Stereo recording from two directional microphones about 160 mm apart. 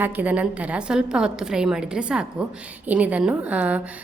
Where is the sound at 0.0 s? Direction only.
10° right (ahead or behind).